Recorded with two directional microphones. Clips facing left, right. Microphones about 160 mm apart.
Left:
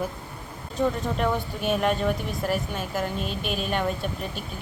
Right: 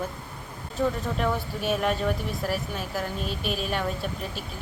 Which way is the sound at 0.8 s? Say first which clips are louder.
Left 2 dB; centre (ahead or behind).